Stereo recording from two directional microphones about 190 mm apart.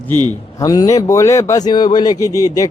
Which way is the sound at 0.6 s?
20° left (ahead or behind).